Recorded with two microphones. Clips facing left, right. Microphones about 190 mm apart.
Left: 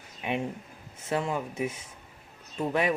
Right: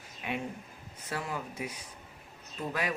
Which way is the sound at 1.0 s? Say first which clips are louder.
Left 7 dB; 25° left (ahead or behind).